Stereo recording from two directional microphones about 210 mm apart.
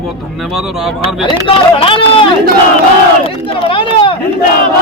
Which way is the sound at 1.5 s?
25° left (ahead or behind).